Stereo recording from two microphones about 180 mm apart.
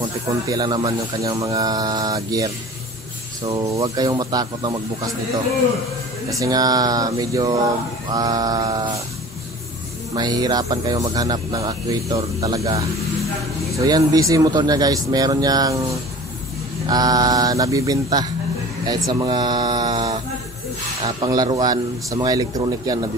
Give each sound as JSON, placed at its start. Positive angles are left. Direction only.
{"t": 0.5, "sound": "speech", "side_deg": -20}
{"t": 6.4, "sound": "speech", "side_deg": -20}
{"t": 10.1, "sound": "speech", "side_deg": -20}